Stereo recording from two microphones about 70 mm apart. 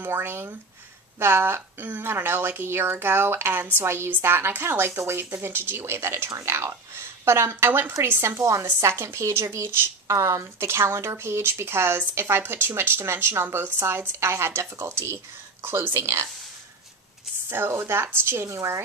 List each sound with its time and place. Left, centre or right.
0.0 s a woman's voice: right
17.5 s a woman's voice: right